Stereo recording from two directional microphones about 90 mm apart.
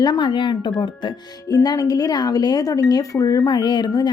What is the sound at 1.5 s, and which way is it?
Speech, 45° left (ahead or behind).